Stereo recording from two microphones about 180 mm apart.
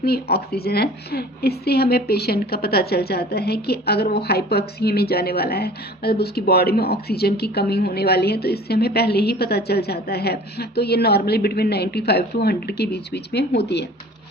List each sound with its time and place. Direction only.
0.0 s speech: 60° left (ahead or behind)